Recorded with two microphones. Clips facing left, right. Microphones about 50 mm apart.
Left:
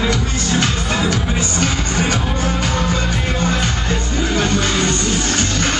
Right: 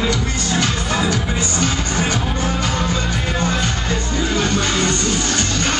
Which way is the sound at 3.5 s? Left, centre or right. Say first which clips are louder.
Left 1 dB; left.